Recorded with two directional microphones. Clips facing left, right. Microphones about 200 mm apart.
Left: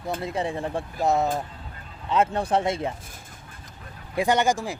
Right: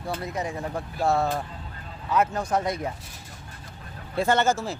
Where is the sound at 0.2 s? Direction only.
30° left (ahead or behind).